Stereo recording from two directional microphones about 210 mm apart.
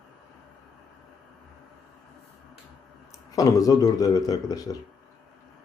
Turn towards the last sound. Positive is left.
turn(degrees=15)  # may be behind; listen again after turning